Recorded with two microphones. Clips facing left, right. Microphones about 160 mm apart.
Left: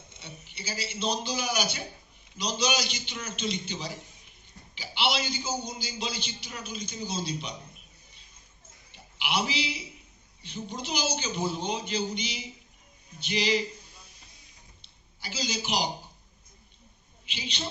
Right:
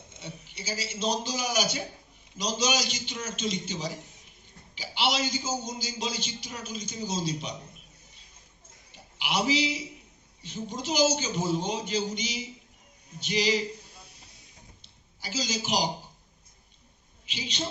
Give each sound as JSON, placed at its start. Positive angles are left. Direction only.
{"t": 0.2, "sound": "a man's voice", "side_deg": -40}
{"t": 9.1, "sound": "a man's voice", "side_deg": -40}
{"t": 14.8, "sound": "a sound", "side_deg": -40}
{"t": 17.3, "sound": "a man's voice", "side_deg": -40}